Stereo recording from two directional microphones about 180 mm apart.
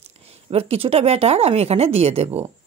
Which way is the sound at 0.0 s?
35° right (ahead or behind).